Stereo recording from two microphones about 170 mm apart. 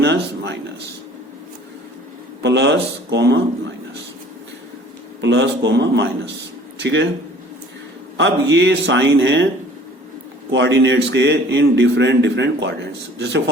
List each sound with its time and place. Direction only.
0.0 s a sound: 90° right
2.4 s a man's voice: 90° right
5.2 s a man's voice: 90° right
8.2 s a man's voice: 90° right
10.5 s a man's voice: 90° right